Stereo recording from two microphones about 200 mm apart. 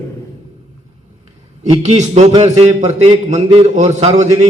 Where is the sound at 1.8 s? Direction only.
35° right (ahead or behind).